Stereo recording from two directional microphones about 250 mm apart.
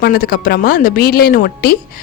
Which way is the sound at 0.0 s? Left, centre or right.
Left.